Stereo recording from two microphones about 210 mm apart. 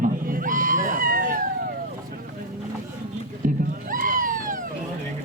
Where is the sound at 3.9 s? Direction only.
40° right (ahead or behind).